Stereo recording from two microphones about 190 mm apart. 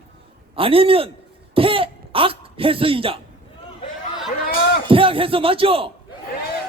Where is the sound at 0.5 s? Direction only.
30° right (ahead or behind).